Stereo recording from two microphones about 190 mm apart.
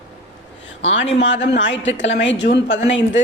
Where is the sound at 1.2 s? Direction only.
70° left (ahead or behind).